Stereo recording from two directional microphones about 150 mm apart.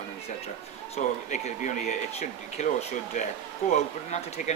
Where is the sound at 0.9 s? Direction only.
50° left (ahead or behind).